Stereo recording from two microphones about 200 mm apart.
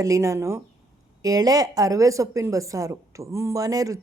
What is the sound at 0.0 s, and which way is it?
A woman's voice, 15° right (ahead or behind).